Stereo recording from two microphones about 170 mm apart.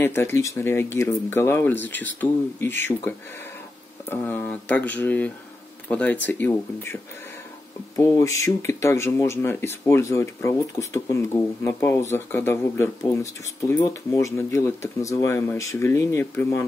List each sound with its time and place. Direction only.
0.0 s speech: 15° left (ahead or behind)